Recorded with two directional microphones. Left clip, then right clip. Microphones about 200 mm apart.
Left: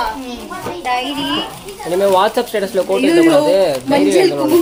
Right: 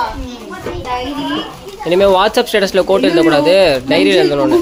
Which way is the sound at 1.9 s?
25° right (ahead or behind).